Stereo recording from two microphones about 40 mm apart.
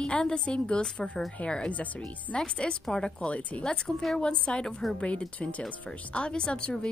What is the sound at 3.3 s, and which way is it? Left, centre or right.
Speech, left.